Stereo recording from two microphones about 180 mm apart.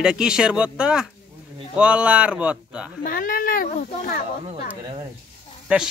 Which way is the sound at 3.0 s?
50° left (ahead or behind).